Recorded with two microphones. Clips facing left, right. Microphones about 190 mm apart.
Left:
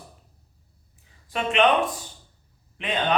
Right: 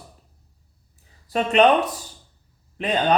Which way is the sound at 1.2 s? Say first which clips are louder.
Right 4 dB; 40° right (ahead or behind).